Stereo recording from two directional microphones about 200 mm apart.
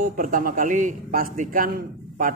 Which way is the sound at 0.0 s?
45° right (ahead or behind).